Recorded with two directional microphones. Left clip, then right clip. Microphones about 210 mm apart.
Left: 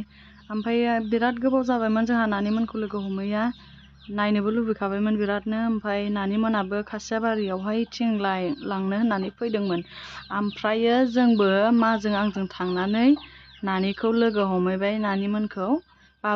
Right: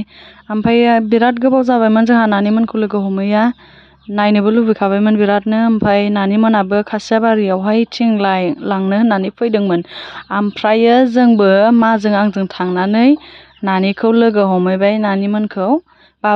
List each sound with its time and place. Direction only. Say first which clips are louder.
0.5 s speech: right 13 dB; 40° right (ahead or behind)